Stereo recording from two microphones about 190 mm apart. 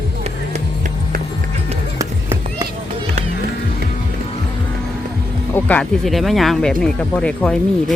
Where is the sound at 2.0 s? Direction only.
15° right (ahead or behind).